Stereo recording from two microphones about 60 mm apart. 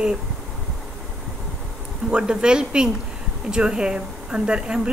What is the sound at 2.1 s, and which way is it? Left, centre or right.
Speech, centre.